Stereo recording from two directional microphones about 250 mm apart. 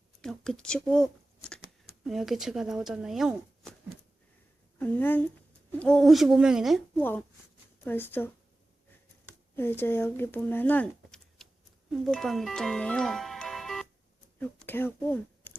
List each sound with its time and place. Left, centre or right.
0.2 s speech: centre
4.8 s speech: centre
9.6 s speech: centre